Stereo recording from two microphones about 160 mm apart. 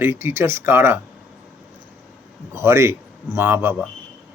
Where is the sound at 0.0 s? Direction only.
15° right (ahead or behind).